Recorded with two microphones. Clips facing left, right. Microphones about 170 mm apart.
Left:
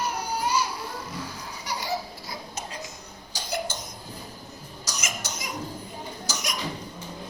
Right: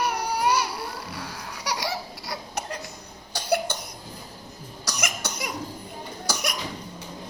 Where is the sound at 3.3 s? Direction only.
60° right (ahead or behind).